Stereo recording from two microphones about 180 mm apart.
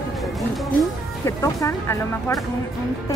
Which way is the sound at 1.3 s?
15° left (ahead or behind).